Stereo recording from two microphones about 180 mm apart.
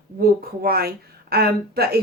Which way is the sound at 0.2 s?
60° right (ahead or behind).